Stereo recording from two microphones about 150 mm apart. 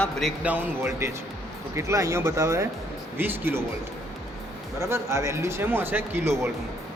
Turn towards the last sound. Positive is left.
turn(degrees=-20)  # may be behind; listen again after turning